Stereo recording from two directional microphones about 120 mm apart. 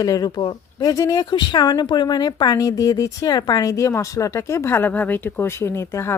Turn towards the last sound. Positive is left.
turn(degrees=20)  # may be behind; listen again after turning